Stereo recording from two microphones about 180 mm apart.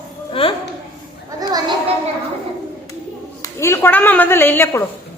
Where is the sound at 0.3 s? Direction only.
30° left (ahead or behind).